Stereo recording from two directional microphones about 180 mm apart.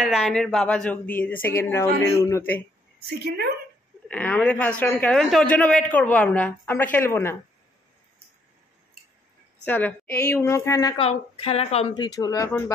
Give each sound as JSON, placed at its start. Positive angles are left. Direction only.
{"t": 0.0, "sound": "a man's voice", "side_deg": 0}
{"t": 3.0, "sound": "a woman's voice", "side_deg": -60}
{"t": 4.1, "sound": "a man's voice", "side_deg": 10}
{"t": 9.7, "sound": "a man's voice", "side_deg": 10}
{"t": 11.0, "sound": "speech", "side_deg": 35}
{"t": 12.2, "sound": "speech", "side_deg": 20}